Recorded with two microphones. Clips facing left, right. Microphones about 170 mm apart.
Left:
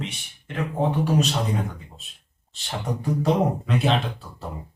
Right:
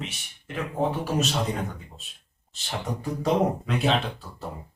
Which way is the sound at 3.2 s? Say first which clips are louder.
Even; centre (ahead or behind).